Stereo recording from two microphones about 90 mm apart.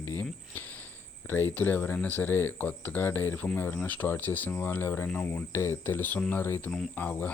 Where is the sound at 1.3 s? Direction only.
20° left (ahead or behind).